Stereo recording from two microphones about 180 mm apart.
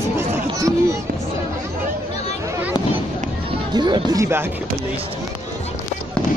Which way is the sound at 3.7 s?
25° right (ahead or behind).